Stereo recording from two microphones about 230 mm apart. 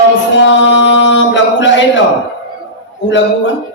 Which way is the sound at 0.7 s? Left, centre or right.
Left.